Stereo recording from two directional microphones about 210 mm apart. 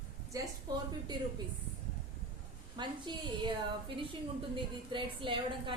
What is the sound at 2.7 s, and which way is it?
A woman's voice, 20° right (ahead or behind).